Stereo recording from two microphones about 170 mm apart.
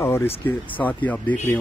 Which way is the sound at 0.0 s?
15° left (ahead or behind).